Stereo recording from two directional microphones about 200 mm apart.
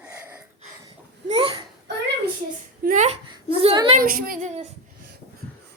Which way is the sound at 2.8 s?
40° right (ahead or behind).